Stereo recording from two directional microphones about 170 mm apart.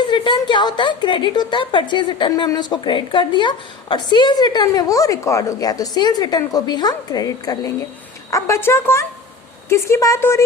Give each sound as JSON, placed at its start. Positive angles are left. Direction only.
{"t": 0.0, "sound": "a woman's voice", "side_deg": 25}